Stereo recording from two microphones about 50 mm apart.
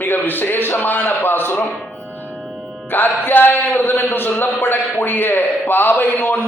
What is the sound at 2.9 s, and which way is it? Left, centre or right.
A man's voice, left.